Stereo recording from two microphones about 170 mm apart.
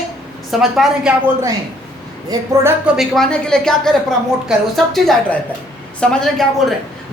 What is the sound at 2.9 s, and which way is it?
Speech, centre (ahead or behind).